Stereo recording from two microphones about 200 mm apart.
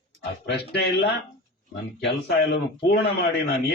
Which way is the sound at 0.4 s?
55° left (ahead or behind).